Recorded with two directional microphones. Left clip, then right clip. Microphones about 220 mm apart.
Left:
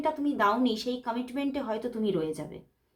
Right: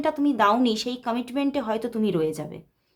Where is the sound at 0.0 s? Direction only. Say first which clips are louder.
Right 5 dB; 40° right (ahead or behind).